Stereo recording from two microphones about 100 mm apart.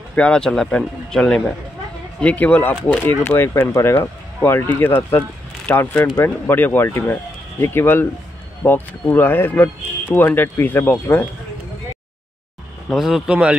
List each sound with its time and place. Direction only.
0.1 s speech: 10° left (ahead or behind)
12.9 s speech: 5° right (ahead or behind)